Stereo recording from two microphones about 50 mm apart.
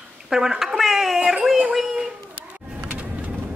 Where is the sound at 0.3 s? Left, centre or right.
Centre.